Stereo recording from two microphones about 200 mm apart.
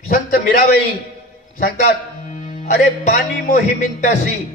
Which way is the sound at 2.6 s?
45° left (ahead or behind).